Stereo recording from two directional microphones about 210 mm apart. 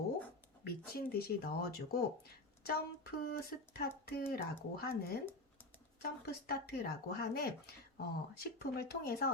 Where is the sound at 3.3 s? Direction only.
45° left (ahead or behind).